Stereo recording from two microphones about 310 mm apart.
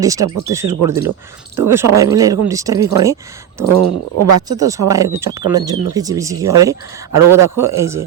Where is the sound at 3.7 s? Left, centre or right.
Right.